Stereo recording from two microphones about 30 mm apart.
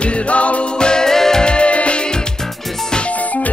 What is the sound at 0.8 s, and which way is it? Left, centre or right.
Music, left.